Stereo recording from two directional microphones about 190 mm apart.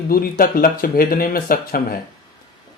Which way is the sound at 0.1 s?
50° left (ahead or behind).